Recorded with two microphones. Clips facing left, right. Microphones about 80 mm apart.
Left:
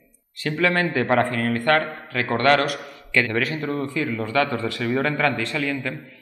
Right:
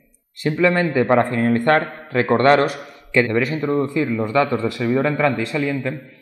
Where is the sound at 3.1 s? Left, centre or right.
Centre.